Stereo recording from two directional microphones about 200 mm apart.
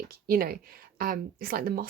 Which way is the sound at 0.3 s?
50° right (ahead or behind).